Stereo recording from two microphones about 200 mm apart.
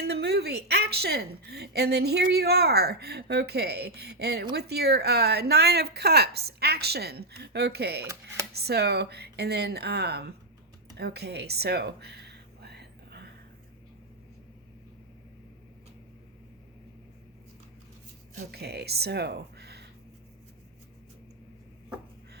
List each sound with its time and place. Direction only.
0.0 s a woman's voice: 55° right (ahead or behind)
10.9 s a sound: 55° right (ahead or behind)
18.5 s speech: 55° right (ahead or behind)